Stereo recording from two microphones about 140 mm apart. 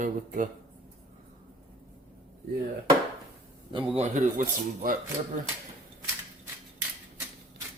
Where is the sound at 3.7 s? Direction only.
50° right (ahead or behind).